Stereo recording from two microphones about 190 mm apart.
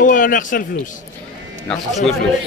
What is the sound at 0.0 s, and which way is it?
Speech, 45° left (ahead or behind).